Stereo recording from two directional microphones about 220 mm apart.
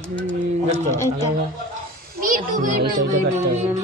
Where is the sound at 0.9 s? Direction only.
10° left (ahead or behind).